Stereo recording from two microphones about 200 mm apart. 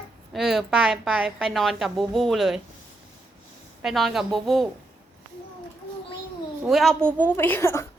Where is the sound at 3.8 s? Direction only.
Centre (ahead or behind).